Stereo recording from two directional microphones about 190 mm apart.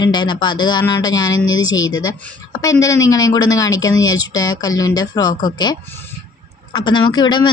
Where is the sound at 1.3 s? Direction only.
90° left.